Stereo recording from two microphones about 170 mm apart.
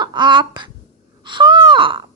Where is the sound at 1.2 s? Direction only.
25° right (ahead or behind).